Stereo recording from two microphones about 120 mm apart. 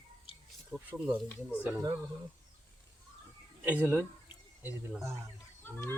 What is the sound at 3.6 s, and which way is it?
Speech, 15° right (ahead or behind).